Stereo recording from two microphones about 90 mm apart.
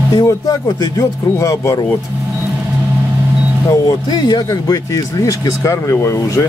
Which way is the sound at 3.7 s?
45° left (ahead or behind).